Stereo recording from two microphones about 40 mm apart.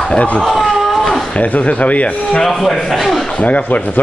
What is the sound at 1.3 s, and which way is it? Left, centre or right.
Speech, left.